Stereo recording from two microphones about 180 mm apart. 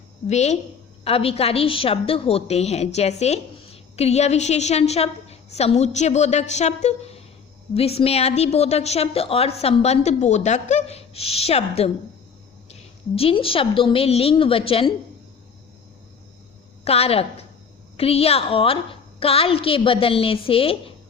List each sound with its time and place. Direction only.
0.3 s a woman's voice: 40° left (ahead or behind)
16.8 s a woman's voice: 35° left (ahead or behind)